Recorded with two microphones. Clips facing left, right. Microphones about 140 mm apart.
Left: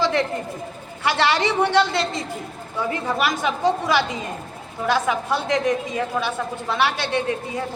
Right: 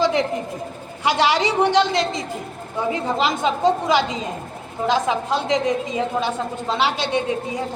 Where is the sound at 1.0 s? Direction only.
15° right (ahead or behind).